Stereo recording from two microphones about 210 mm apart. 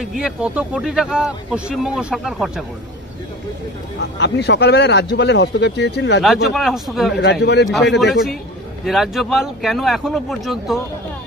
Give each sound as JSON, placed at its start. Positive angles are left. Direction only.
{"t": 0.0, "sound": "speech", "side_deg": 0}
{"t": 4.0, "sound": "speech", "side_deg": 50}
{"t": 6.2, "sound": "speech", "side_deg": 0}